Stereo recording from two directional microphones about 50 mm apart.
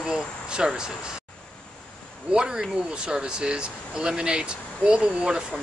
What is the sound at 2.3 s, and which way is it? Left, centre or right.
Speech, centre.